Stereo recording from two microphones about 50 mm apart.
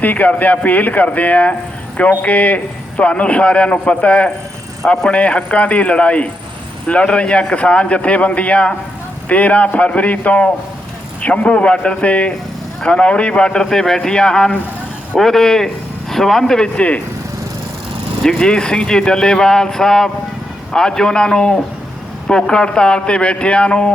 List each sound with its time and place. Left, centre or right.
0.0 s a man's voice: left
11.5 s a man's voice: left
16.7 s a man's voice: left
18.2 s a man's voice: centre